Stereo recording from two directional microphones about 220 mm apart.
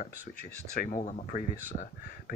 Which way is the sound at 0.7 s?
35° left (ahead or behind).